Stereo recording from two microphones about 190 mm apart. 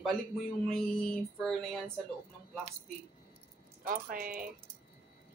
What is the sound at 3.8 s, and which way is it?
Speech, 50° right (ahead or behind).